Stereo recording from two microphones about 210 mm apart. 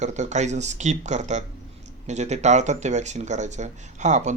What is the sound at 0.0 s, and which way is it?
A man's voice, 35° right (ahead or behind).